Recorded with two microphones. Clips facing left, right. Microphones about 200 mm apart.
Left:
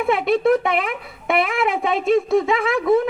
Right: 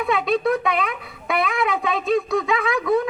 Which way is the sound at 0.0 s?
25° left (ahead or behind).